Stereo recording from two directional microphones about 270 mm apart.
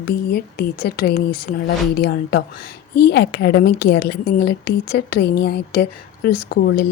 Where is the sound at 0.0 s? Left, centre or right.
Left.